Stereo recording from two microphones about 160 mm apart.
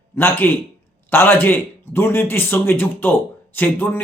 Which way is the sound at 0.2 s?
15° left (ahead or behind).